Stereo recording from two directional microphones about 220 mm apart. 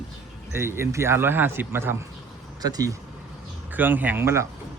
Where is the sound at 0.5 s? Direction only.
10° right (ahead or behind).